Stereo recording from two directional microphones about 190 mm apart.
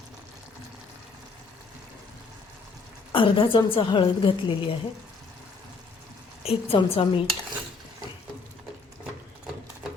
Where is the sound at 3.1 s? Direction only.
25° left (ahead or behind).